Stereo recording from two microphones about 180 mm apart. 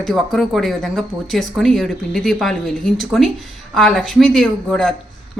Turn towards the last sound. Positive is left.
turn(degrees=0)  # may be behind; listen again after turning